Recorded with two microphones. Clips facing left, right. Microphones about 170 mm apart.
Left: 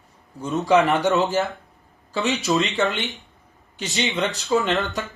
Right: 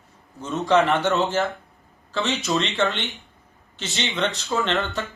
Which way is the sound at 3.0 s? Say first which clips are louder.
Left 2 dB; centre (ahead or behind).